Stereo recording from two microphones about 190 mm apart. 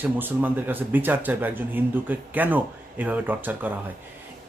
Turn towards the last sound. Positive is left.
turn(degrees=-10)  # may be behind; listen again after turning